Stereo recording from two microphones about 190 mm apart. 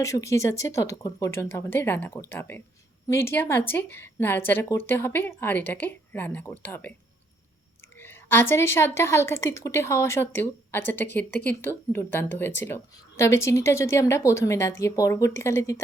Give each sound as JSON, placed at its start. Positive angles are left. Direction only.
{"t": 0.0, "sound": "a woman's voice", "side_deg": 15}
{"t": 7.9, "sound": "a woman's voice", "side_deg": 10}